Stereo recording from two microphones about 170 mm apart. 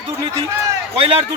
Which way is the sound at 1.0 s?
35° right (ahead or behind).